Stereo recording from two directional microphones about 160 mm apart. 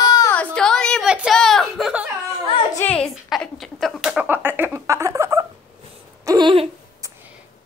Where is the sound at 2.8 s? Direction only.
10° left (ahead or behind).